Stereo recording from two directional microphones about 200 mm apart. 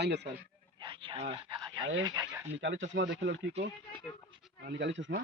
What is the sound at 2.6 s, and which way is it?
Speech, 65° right (ahead or behind).